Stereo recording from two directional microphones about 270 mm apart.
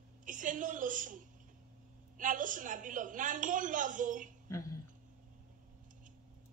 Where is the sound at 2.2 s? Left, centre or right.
Right.